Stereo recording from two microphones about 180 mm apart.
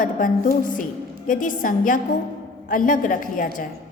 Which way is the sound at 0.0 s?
50° left (ahead or behind).